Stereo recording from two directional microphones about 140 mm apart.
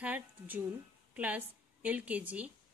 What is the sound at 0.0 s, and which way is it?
A woman's voice, 10° right (ahead or behind).